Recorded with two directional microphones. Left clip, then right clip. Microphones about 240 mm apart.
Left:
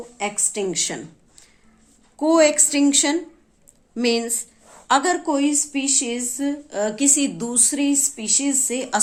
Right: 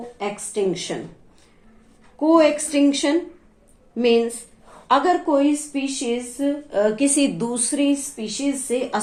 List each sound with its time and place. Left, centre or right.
0.2 s speech: left
2.1 s speech: left